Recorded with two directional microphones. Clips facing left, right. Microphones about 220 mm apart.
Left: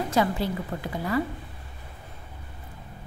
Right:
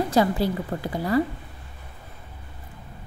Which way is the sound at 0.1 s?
35° right (ahead or behind).